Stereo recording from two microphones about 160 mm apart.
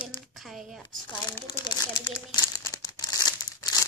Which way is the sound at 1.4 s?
25° left (ahead or behind).